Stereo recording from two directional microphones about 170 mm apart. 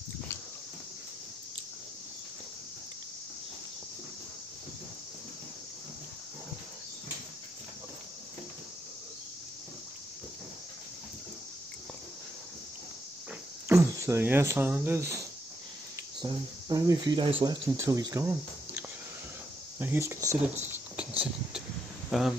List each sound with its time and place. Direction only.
13.7 s speech: 15° right (ahead or behind)
17.6 s speech: 20° right (ahead or behind)
20.6 s a sound: 10° right (ahead or behind)
22.1 s speech: centre (ahead or behind)